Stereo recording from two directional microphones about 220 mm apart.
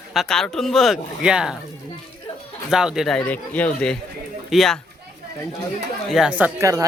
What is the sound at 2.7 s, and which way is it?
Speech, 5° right (ahead or behind).